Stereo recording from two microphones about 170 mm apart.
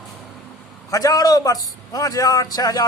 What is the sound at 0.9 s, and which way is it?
A man's voice, 20° left (ahead or behind).